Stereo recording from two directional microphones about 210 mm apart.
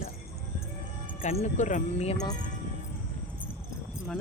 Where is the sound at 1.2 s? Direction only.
30° left (ahead or behind).